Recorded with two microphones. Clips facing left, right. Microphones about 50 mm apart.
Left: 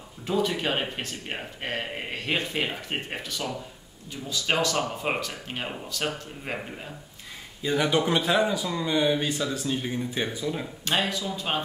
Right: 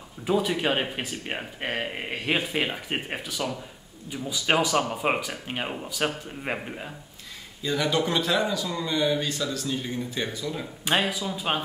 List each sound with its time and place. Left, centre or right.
0.3 s speech: centre
7.6 s speech: centre
10.9 s speech: centre